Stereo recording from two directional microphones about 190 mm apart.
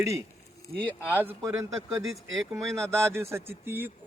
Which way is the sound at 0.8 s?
10° left (ahead or behind).